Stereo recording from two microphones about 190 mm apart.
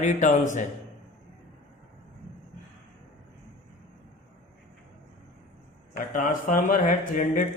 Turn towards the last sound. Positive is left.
turn(degrees=40)  # may be behind; listen again after turning